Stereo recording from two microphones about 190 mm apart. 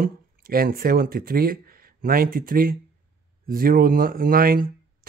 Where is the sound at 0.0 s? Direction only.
50° right (ahead or behind).